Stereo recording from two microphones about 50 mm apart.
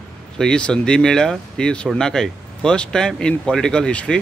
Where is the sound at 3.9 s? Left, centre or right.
Left.